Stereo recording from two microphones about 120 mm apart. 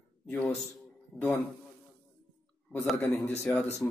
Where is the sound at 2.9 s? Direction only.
15° left (ahead or behind).